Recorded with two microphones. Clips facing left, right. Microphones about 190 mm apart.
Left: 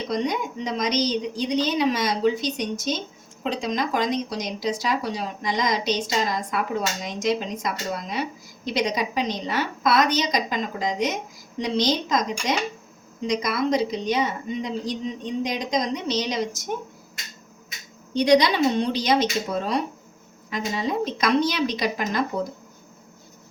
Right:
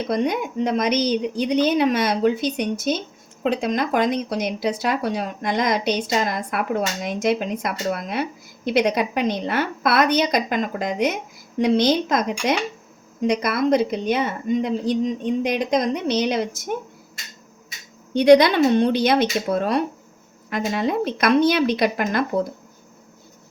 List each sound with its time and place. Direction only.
0.0 s speech: 55° right (ahead or behind)
18.1 s speech: 55° right (ahead or behind)